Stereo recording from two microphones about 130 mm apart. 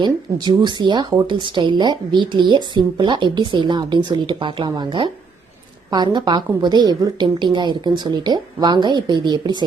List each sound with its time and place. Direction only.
0.0 s speech: 35° right (ahead or behind)